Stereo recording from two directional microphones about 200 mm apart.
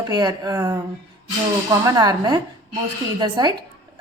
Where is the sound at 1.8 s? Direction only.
20° right (ahead or behind).